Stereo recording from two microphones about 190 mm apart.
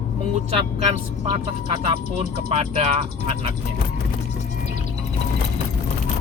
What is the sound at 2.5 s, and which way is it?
Speech, 35° right (ahead or behind).